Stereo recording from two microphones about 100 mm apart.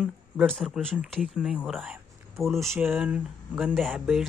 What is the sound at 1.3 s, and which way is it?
Speech, 10° right (ahead or behind).